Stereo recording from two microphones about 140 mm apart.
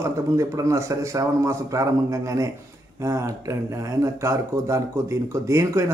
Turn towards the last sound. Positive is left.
turn(degrees=-20)  # may be behind; listen again after turning